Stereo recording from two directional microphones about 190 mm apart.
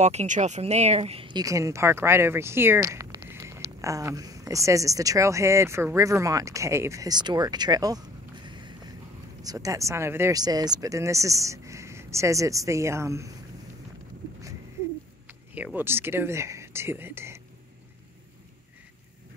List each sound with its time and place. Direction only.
0.0 s speech: 35° right (ahead or behind); by 8.0 s 20° right (ahead or behind)
8.5 s a sound: 25° right (ahead or behind)
9.4 s speech: 20° right (ahead or behind)
15.5 s speech: 10° right (ahead or behind)